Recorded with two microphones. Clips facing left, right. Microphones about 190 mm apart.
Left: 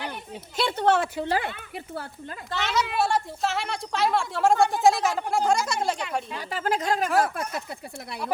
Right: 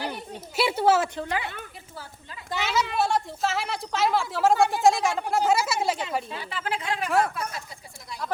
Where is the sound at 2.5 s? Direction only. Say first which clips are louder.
Even; 5° right (ahead or behind).